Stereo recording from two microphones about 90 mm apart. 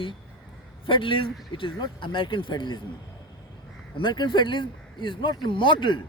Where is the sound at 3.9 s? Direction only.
60° left (ahead or behind).